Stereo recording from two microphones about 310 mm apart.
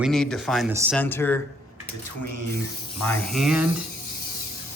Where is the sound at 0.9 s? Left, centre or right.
Centre.